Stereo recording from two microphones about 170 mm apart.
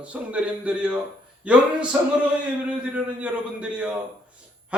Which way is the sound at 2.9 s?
5° right (ahead or behind).